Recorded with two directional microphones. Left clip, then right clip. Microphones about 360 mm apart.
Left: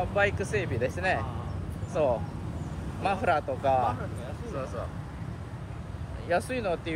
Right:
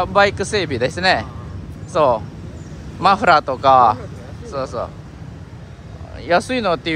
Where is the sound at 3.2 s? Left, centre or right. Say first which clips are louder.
Right 13 dB; right.